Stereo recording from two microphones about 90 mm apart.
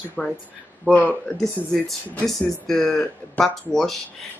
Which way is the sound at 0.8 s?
15° left (ahead or behind).